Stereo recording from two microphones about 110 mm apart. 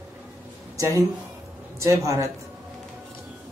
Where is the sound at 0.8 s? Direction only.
30° right (ahead or behind).